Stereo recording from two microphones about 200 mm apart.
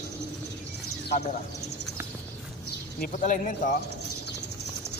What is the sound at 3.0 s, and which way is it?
Speech, 40° left (ahead or behind).